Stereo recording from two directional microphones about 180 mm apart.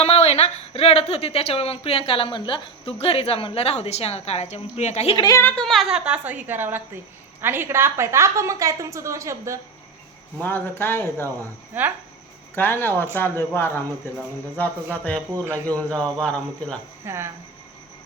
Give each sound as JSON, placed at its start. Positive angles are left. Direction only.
{"t": 0.0, "sound": "speech", "side_deg": 35}
{"t": 5.1, "sound": "a woman's voice", "side_deg": 20}
{"t": 10.4, "sound": "speech", "side_deg": 10}
{"t": 11.3, "sound": "a woman's voice", "side_deg": -10}
{"t": 12.5, "sound": "a woman's voice", "side_deg": 10}
{"t": 17.1, "sound": "a woman's voice", "side_deg": -15}